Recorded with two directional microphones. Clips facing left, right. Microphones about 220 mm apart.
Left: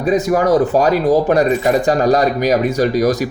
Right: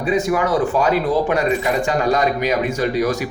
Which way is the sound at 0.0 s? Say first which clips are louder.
Left 4 dB; 40° left (ahead or behind).